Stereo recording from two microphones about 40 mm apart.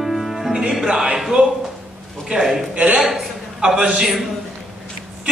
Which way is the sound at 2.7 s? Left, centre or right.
Right.